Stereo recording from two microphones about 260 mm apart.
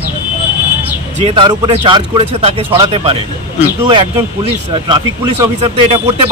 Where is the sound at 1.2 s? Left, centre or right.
Right.